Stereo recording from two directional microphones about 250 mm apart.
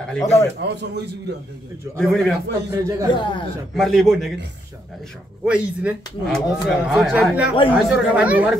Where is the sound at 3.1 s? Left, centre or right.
Centre.